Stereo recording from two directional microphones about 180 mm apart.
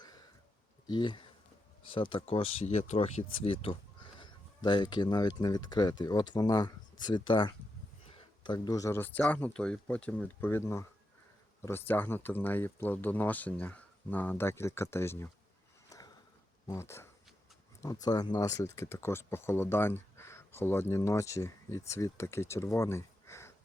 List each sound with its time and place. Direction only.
0.0 s a sound: 20° left (ahead or behind)
0.9 s speech: 25° left (ahead or behind)
15.9 s sniff: 20° left (ahead or behind)
16.6 s speech: 15° left (ahead or behind)